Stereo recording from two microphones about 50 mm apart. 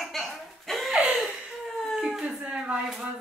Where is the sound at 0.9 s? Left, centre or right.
Centre.